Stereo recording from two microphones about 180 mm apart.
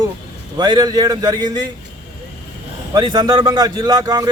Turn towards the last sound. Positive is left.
turn(degrees=-20)  # may be behind; listen again after turning